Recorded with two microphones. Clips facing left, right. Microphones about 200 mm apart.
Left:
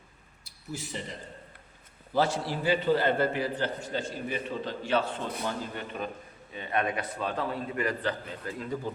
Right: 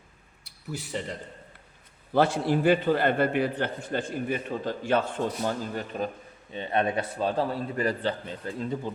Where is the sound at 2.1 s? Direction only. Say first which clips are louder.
Right 5 dB; 55° right (ahead or behind).